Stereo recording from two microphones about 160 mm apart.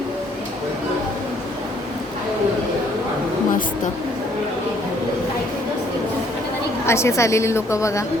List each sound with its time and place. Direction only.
6.8 s a woman's voice: 15° left (ahead or behind)